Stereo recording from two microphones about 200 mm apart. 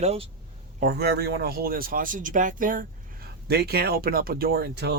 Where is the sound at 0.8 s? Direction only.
55° right (ahead or behind).